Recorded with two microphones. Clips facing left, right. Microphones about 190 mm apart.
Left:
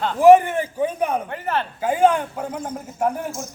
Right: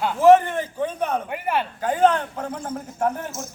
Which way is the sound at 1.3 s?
10° right (ahead or behind).